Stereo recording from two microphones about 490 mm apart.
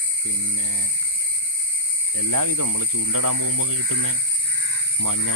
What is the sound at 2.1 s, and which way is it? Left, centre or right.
Speech, right.